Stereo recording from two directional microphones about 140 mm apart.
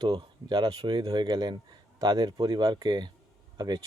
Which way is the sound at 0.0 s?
35° right (ahead or behind).